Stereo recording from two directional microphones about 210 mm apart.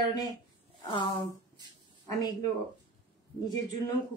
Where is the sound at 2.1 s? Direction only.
20° left (ahead or behind).